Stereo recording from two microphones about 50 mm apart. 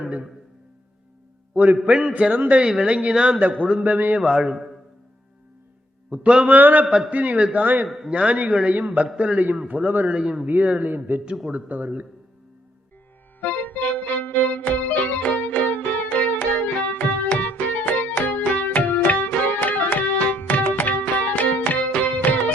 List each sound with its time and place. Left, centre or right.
1.5 s a man's voice: right
2.1 s a man's voice: right
2.6 s a man's voice: centre
4.2 s a man's voice: centre
6.1 s a man's voice: right
6.5 s a man's voice: right
7.9 s a man's voice: centre
8.1 s a man's voice: right
10.1 s a man's voice: centre
10.4 s a man's voice: right
13.4 s music: left